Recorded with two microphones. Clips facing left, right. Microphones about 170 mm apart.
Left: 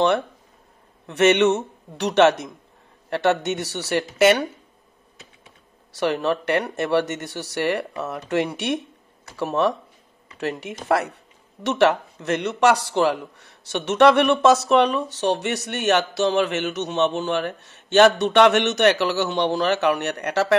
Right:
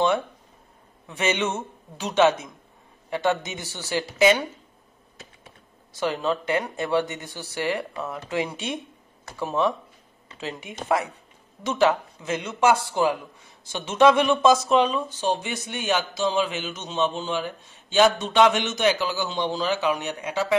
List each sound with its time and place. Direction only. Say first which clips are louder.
1.0 s speech: left 9 dB; 70° left (ahead or behind)
5.9 s speech: left 3 dB; 70° left (ahead or behind)
10.9 s speech: left 3 dB; 70° left (ahead or behind)
12.2 s speech: left 4 dB; 70° left (ahead or behind)